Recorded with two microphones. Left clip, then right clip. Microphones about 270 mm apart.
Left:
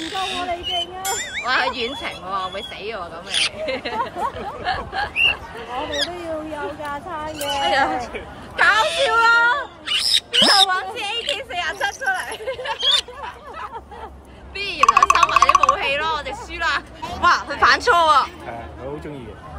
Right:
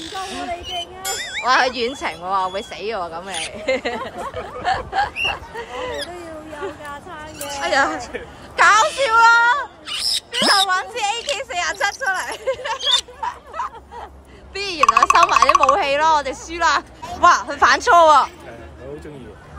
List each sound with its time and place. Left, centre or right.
0.7 s a sound: centre
2.0 s speech: centre
6.8 s speech: left
7.6 s speech: centre
8.5 s wail: centre
11.3 s hubbub: centre
14.5 s a sound: centre
14.8 s a sound: centre
15.7 s speech: centre